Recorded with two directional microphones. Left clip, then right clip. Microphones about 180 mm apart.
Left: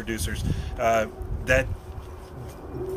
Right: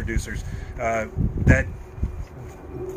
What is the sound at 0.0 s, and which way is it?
A man's voice, centre (ahead or behind).